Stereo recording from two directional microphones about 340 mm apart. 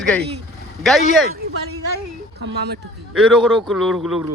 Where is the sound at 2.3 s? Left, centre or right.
Right.